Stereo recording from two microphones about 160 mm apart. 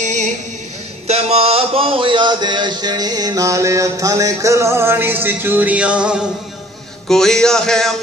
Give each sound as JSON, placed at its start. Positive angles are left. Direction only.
{"t": 0.0, "sound": "singing", "side_deg": -50}
{"t": 1.0, "sound": "speech", "side_deg": -40}
{"t": 7.1, "sound": "music", "side_deg": 5}